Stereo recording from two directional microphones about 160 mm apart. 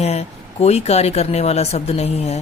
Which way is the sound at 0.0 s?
40° left (ahead or behind).